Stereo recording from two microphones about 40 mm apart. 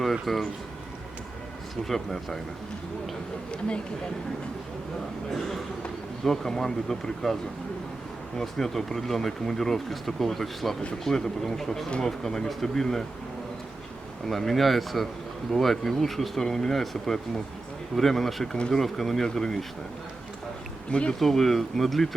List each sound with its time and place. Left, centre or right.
0.0 s speech: centre
1.7 s speech: centre
5.3 s speech: centre
8.4 s speech: centre
11.9 s speech: left
12.2 s speech: centre
14.3 s speech: centre
21.1 s speech: centre